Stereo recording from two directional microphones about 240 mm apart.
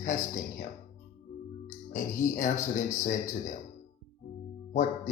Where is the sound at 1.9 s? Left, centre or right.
Left.